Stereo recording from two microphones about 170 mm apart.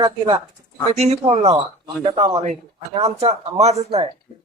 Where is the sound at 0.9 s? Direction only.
40° right (ahead or behind).